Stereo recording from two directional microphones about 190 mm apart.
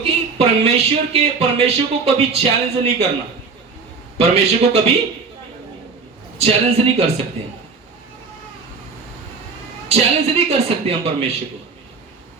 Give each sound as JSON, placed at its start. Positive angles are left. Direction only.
{"t": 0.0, "sound": "speech", "side_deg": -35}
{"t": 4.2, "sound": "speech", "side_deg": -35}
{"t": 6.4, "sound": "speech", "side_deg": -35}
{"t": 9.9, "sound": "speech", "side_deg": -30}